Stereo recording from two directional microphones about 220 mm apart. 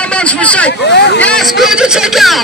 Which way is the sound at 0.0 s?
5° left (ahead or behind).